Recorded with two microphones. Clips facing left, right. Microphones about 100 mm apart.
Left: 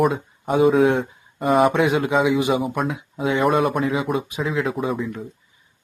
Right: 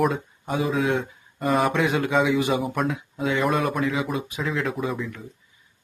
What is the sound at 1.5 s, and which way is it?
Speech, centre (ahead or behind).